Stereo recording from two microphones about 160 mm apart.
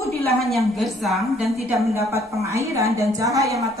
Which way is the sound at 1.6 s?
20° right (ahead or behind).